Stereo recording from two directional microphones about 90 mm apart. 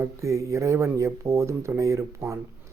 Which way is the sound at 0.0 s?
35° right (ahead or behind).